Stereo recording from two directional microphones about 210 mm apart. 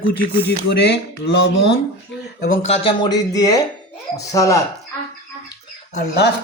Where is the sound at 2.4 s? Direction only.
45° left (ahead or behind).